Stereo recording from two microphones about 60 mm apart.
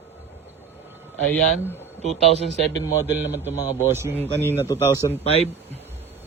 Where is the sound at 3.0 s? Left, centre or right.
Right.